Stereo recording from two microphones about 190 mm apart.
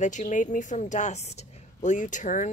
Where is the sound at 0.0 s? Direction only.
40° left (ahead or behind).